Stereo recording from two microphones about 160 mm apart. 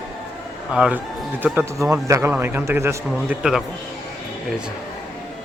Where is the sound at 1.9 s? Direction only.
15° right (ahead or behind).